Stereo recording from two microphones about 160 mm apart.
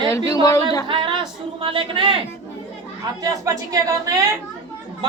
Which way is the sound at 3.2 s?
20° right (ahead or behind).